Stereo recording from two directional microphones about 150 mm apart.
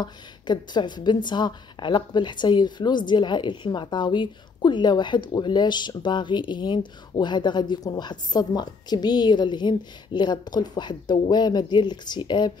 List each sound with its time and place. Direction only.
0.0 s a woman's voice: 30° left (ahead or behind)